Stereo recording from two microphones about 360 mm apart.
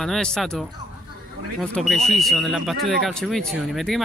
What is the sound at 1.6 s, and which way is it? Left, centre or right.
Speech, centre.